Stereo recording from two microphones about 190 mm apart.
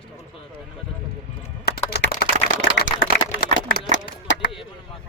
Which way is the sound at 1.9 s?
55° left (ahead or behind).